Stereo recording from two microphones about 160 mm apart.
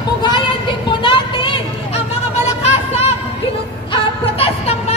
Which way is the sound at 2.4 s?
40° left (ahead or behind).